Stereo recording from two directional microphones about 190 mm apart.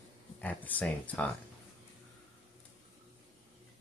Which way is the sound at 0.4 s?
10° left (ahead or behind).